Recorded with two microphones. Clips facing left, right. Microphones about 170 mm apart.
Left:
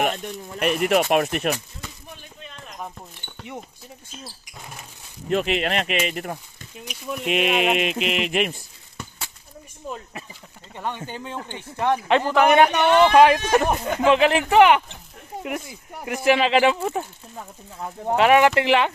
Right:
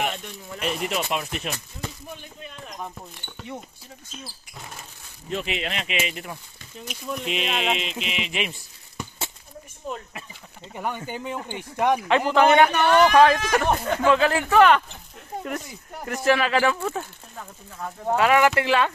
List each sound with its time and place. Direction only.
0.0 s speech: 45° left (ahead or behind)
0.7 s speech: 60° left (ahead or behind)
5.3 s speech: 55° left (ahead or behind)
6.8 s speech: 15° left (ahead or behind)
7.2 s speech: 55° left (ahead or behind)
10.7 s speech: 10° right (ahead or behind)
12.4 s speech: 15° left (ahead or behind)
13.8 s speech: 15° left (ahead or behind)
16.3 s speech: 20° left (ahead or behind)